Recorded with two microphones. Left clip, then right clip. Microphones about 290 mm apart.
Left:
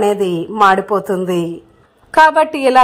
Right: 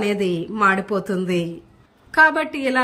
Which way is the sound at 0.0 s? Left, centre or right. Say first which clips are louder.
Left 7 dB; centre.